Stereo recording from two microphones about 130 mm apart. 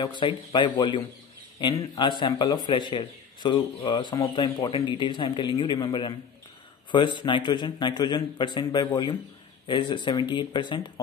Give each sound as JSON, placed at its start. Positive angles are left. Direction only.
{"t": 0.0, "sound": "a man's voice", "side_deg": 35}